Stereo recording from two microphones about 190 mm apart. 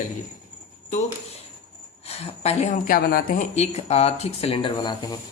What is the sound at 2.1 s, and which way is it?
Speech, 35° left (ahead or behind).